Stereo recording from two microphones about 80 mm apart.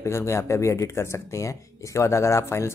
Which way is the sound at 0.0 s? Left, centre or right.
Left.